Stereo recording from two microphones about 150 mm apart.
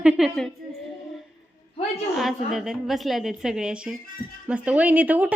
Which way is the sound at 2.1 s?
Centre (ahead or behind).